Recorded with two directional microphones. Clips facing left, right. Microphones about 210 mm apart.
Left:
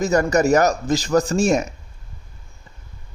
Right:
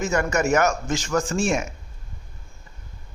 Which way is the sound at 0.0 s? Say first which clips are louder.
Left 5 dB; 40° left (ahead or behind).